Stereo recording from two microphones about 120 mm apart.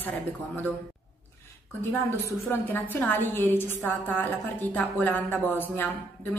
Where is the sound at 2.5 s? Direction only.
15° left (ahead or behind).